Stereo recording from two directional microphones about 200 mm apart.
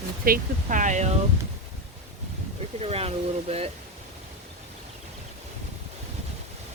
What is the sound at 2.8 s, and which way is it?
Speech, 30° right (ahead or behind).